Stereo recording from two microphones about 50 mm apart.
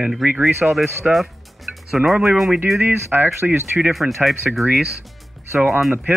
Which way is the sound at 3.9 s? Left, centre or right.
Centre.